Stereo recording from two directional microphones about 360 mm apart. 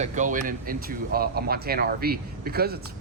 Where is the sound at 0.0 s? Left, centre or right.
Centre.